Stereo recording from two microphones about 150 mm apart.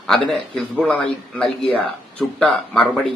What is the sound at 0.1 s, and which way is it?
Speech, 5° left (ahead or behind).